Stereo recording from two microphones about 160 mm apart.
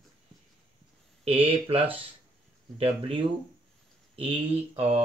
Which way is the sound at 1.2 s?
35° right (ahead or behind).